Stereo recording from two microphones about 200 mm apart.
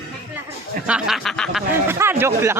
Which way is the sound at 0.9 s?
5° right (ahead or behind).